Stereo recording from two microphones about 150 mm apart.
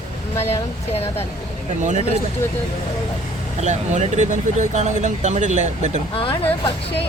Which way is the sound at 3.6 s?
50° right (ahead or behind).